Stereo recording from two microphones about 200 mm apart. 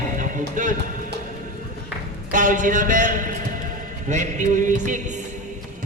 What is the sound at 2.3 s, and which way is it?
A man's voice, 40° right (ahead or behind).